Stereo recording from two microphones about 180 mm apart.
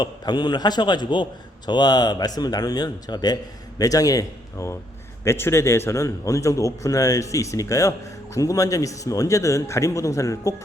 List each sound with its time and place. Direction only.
0.0 s a man's voice: 25° left (ahead or behind)